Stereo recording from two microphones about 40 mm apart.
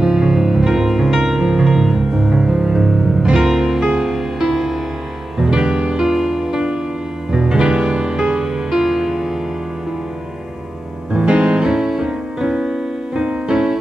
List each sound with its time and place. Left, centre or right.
0.0 s music: centre
11.1 s music: centre